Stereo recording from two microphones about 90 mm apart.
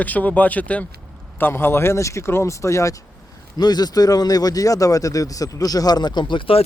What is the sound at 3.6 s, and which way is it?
A man's voice, 50° left (ahead or behind).